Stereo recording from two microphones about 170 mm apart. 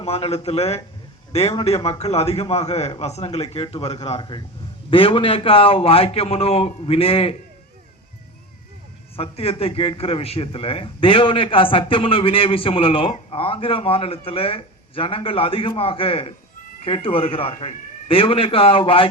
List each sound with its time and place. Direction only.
0.0 s a man's voice: 35° left (ahead or behind)
9.1 s a man's voice: 35° left (ahead or behind)